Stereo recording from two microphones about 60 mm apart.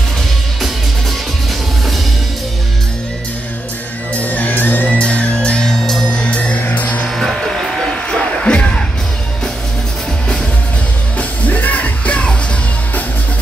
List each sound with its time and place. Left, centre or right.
4.2 s music: left
6.8 s music: left
7.2 s music: centre
11.1 s music: left